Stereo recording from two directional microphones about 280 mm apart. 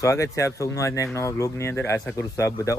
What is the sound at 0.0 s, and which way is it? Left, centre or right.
Speech, centre.